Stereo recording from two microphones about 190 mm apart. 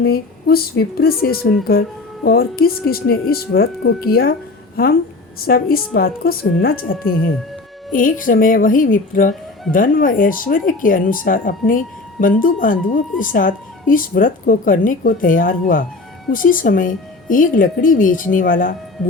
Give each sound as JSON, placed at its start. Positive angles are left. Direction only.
{"t": 0.0, "sound": "speech", "side_deg": 55}
{"t": 5.5, "sound": "speech", "side_deg": 50}